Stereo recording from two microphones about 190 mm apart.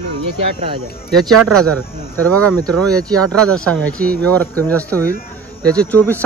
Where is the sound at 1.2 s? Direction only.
Centre (ahead or behind).